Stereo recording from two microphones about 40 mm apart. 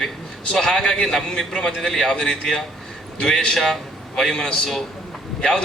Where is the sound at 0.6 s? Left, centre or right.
Left.